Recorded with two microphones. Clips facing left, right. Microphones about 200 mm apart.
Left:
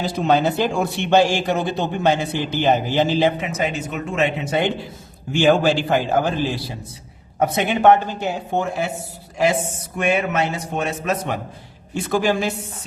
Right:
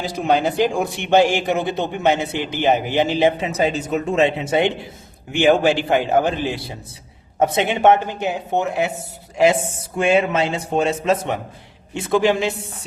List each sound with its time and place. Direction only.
0.3 s a man's voice: 15° right (ahead or behind)
3.4 s speech: 35° right (ahead or behind)
10.0 s speech: 30° right (ahead or behind)